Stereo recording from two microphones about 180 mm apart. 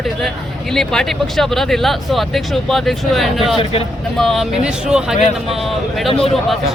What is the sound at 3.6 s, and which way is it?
Speech, 30° left (ahead or behind).